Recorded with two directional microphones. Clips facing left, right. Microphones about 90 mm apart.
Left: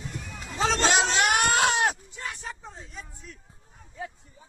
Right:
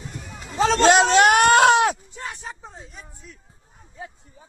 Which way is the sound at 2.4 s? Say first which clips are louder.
Right 2 dB; 15° right (ahead or behind).